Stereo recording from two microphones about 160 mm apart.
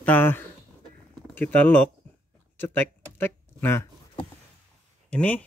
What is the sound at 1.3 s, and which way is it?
Speech, 10° left (ahead or behind).